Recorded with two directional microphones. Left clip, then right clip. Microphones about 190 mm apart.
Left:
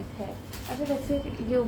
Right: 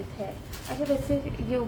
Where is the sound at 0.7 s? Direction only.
25° right (ahead or behind).